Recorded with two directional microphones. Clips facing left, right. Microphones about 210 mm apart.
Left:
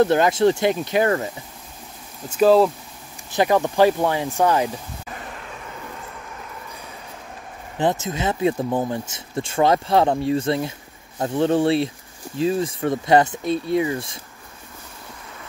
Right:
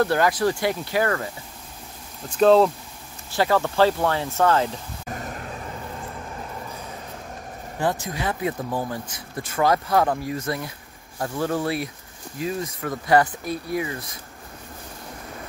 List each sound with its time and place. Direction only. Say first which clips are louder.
0.0 s speech: left 4 dB; 20° left (ahead or behind)
2.2 s speech: left 1 dB; 5° left (ahead or behind)
3.3 s speech: left 3 dB; 20° left (ahead or behind)
5.0 s vehicle: right 3 dB; 45° right (ahead or behind)
7.8 s speech: left 4 dB; 20° left (ahead or behind)